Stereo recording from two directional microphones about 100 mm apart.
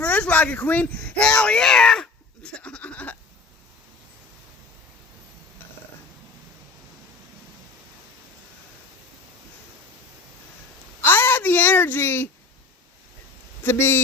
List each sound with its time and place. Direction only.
0.0 s speech: 15° left (ahead or behind)
11.0 s a sound: 20° left (ahead or behind)
13.7 s speech: 25° left (ahead or behind)